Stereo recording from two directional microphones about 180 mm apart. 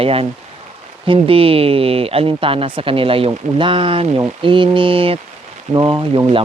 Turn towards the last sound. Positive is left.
turn(degrees=-30)  # may be behind; listen again after turning